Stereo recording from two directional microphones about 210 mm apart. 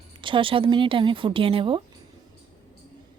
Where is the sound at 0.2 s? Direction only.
25° right (ahead or behind).